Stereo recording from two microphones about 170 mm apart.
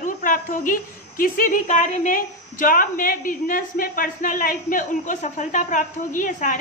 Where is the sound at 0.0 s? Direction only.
50° left (ahead or behind).